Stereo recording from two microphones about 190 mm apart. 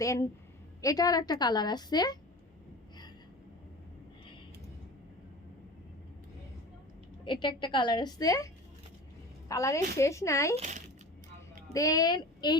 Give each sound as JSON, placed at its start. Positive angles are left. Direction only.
{"t": 0.0, "sound": "a woman's voice", "side_deg": 15}
{"t": 7.3, "sound": "a woman's voice", "side_deg": 25}
{"t": 9.5, "sound": "a woman's voice", "side_deg": 15}
{"t": 10.5, "sound": "a child's voice", "side_deg": -40}
{"t": 11.7, "sound": "a woman's voice", "side_deg": 20}